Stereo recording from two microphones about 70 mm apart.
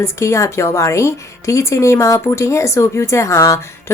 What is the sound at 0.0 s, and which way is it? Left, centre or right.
A woman's voice, left.